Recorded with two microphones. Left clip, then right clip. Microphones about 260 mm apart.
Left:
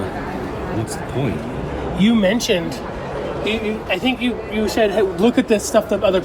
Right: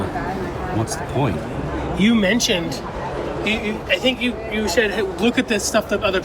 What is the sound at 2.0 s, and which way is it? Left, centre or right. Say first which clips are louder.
Speech: left 1 dB; centre.